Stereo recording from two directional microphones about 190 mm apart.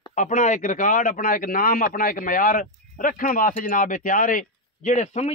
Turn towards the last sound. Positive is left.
turn(degrees=35)  # may be behind; listen again after turning